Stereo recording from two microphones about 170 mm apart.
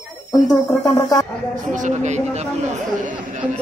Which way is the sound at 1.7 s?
45° right (ahead or behind).